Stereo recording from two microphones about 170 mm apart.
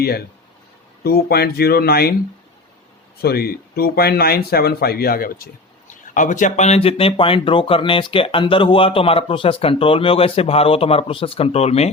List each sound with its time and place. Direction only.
1.0 s speech: 65° left (ahead or behind)
3.2 s speech: 65° left (ahead or behind)
6.1 s speech: 50° left (ahead or behind)